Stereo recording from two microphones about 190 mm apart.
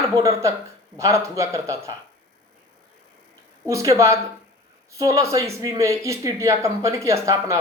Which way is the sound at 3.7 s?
15° right (ahead or behind).